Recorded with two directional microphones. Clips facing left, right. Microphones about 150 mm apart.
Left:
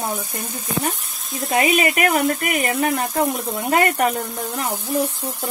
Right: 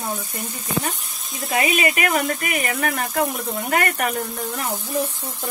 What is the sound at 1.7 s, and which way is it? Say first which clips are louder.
Speech: left 3 dB; 35° left (ahead or behind).